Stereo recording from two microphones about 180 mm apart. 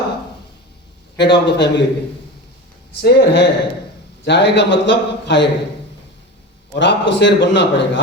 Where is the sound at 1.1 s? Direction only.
70° left (ahead or behind).